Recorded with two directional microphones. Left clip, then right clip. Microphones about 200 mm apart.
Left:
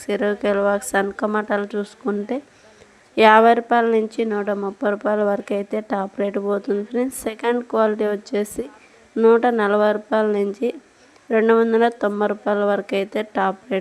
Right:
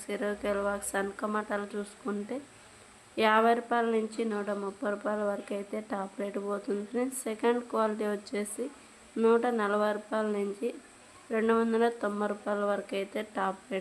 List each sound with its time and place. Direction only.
0.0 s a woman's voice: 40° left (ahead or behind)